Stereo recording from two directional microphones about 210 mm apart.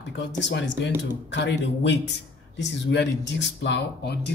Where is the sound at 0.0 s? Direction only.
55° left (ahead or behind).